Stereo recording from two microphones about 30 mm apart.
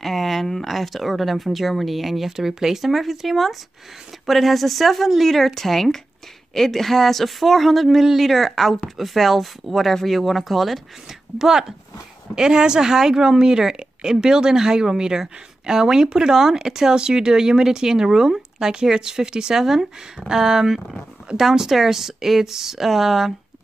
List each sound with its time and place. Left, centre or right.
0.0 s a woman's voice: centre
11.3 s speech: centre
12.4 s speech: right
19.6 s speech: centre